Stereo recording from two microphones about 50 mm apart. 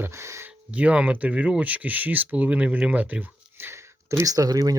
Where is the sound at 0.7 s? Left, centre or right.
Right.